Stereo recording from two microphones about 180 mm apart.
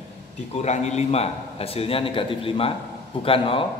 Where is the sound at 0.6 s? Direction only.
40° left (ahead or behind).